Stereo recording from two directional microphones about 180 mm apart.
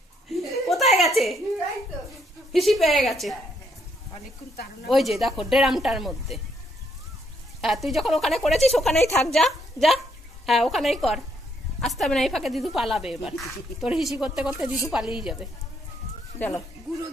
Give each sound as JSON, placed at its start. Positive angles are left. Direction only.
{"t": 0.3, "sound": "chuckle", "side_deg": 0}
{"t": 2.5, "sound": "a woman's voice", "side_deg": 0}
{"t": 4.8, "sound": "a woman's voice", "side_deg": 0}
{"t": 7.6, "sound": "a woman's voice", "side_deg": 0}
{"t": 16.3, "sound": "speech", "side_deg": 10}